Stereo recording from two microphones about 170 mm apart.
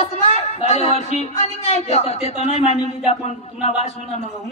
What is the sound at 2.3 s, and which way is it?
Speech, 40° right (ahead or behind).